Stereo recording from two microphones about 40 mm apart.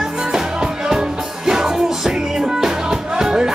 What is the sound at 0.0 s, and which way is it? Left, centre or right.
Music, centre.